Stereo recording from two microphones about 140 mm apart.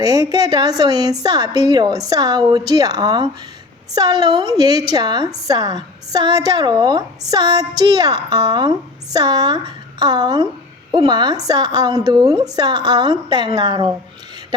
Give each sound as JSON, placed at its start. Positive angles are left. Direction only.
{"t": 0.0, "sound": "a woman's voice", "side_deg": -30}